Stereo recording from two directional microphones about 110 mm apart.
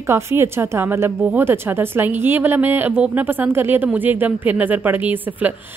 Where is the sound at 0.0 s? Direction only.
25° right (ahead or behind).